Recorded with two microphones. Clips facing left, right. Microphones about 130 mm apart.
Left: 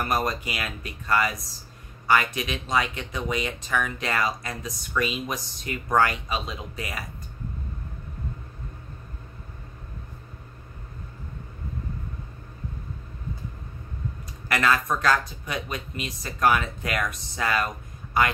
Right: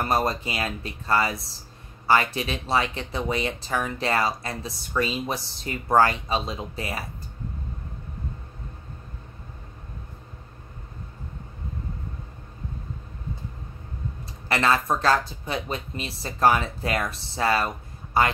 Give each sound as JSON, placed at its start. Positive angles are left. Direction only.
{"t": 0.0, "sound": "speech", "side_deg": -30}
{"t": 14.5, "sound": "speech", "side_deg": -30}